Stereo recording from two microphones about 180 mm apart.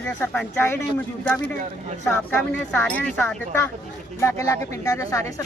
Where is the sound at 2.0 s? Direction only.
10° left (ahead or behind).